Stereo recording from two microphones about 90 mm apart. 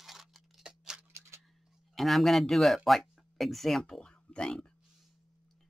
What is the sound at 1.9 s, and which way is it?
Speech, centre (ahead or behind).